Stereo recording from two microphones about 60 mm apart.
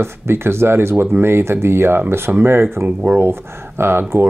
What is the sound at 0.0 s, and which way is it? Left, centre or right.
Speech, right.